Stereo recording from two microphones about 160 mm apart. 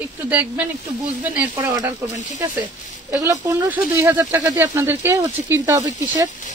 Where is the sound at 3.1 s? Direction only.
20° right (ahead or behind).